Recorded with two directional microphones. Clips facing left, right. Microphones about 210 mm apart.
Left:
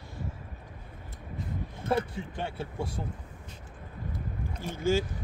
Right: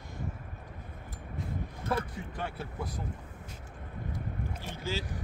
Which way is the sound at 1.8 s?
25° left (ahead or behind).